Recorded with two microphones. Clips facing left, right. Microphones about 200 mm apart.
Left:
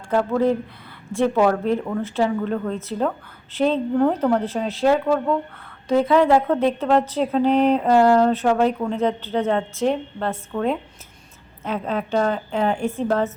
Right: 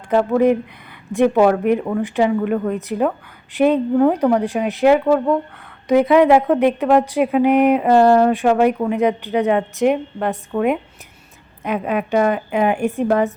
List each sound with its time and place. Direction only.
0.1 s speech: 15° right (ahead or behind)